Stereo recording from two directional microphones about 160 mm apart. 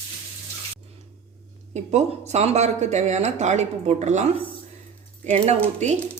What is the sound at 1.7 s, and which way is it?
Speech, 45° right (ahead or behind).